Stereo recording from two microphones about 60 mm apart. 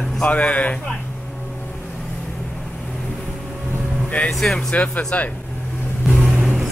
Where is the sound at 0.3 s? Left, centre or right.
Left.